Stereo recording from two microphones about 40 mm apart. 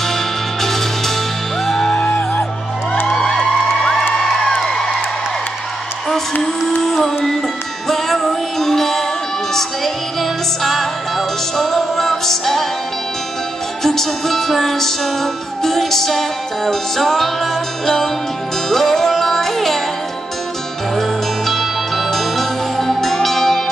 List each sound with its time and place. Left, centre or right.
0.1 s music: centre
2.0 s music: left
3.3 s music: centre
6.8 s music: centre
10.6 s music: centre
13.8 s music: centre
21.5 s music: centre